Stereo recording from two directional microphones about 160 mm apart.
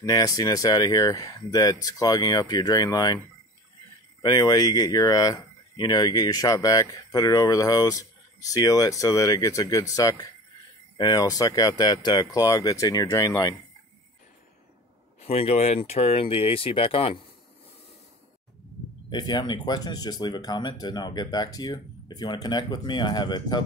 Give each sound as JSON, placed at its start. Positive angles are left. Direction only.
{"t": 0.0, "sound": "speech", "side_deg": 25}
{"t": 4.2, "sound": "speech", "side_deg": 25}
{"t": 15.1, "sound": "speech", "side_deg": 40}
{"t": 19.0, "sound": "speech", "side_deg": 25}